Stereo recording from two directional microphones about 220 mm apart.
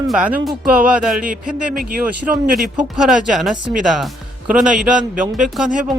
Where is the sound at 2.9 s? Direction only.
Centre (ahead or behind).